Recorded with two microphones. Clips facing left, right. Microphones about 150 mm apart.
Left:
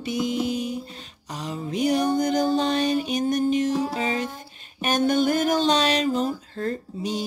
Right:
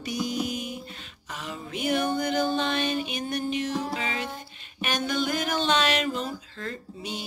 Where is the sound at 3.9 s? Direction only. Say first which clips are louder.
Left 5 dB; 40° left (ahead or behind).